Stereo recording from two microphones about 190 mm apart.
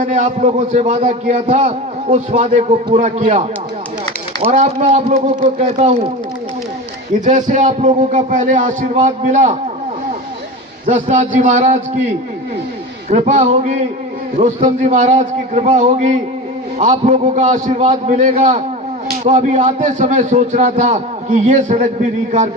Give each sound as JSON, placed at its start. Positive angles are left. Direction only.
{"t": 0.0, "sound": "a man's voice", "side_deg": -40}
{"t": 4.5, "sound": "a man's voice", "side_deg": -35}
{"t": 7.3, "sound": "a man's voice", "side_deg": -40}
{"t": 10.8, "sound": "a man's voice", "side_deg": -40}
{"t": 13.1, "sound": "a man's voice", "side_deg": -35}